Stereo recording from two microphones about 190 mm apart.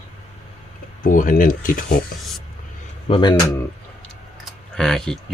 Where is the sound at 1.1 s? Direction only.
45° left (ahead or behind).